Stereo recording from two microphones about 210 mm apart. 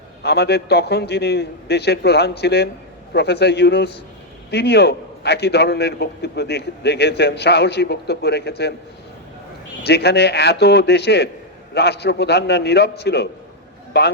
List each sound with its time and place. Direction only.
0.2 s a man's voice: 50° left (ahead or behind)
9.8 s a man's voice: 50° left (ahead or behind)